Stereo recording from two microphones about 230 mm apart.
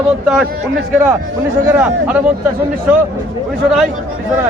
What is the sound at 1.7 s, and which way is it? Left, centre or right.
Speech, centre.